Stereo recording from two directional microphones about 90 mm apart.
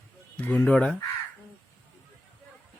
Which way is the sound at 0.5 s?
15° left (ahead or behind).